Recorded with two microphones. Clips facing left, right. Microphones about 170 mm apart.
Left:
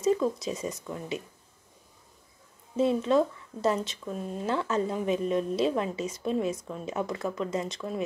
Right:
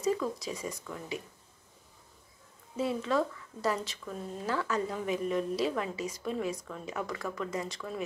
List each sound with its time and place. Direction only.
0.0 s speech: 25° left (ahead or behind)
2.8 s speech: 25° left (ahead or behind)